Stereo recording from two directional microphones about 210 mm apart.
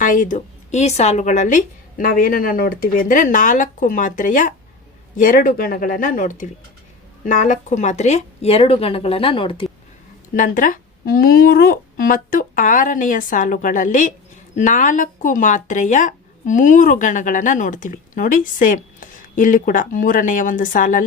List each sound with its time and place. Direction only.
0.0 s speech: 40° left (ahead or behind)
10.3 s speech: 40° left (ahead or behind)